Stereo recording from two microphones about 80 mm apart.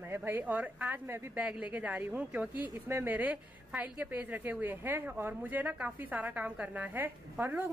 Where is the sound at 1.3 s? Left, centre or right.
Centre.